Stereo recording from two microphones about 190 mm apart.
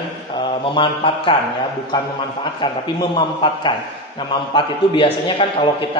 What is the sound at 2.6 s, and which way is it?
A man's voice, 25° left (ahead or behind).